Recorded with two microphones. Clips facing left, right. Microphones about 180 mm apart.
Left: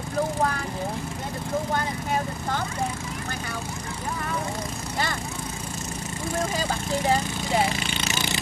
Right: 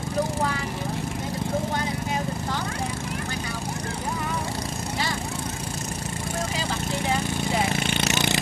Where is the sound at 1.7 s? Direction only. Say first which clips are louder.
Left 1 dB; 50° left (ahead or behind).